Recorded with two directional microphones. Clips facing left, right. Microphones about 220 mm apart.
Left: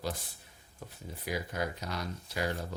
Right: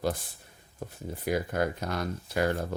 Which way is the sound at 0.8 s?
45° right (ahead or behind).